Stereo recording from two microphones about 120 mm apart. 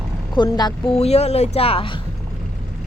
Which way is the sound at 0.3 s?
35° left (ahead or behind).